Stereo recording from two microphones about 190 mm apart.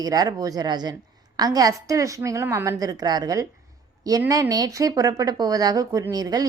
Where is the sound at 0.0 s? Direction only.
20° right (ahead or behind).